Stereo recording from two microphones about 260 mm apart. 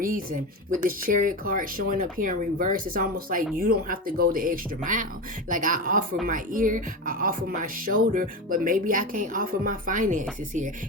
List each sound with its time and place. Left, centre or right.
0.7 s speech: right